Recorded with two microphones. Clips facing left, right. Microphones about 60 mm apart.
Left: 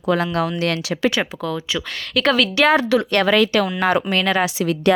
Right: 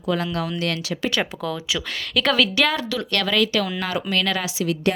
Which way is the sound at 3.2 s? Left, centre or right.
Left.